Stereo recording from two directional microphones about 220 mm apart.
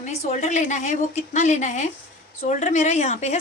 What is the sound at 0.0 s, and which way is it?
Speech, 30° left (ahead or behind).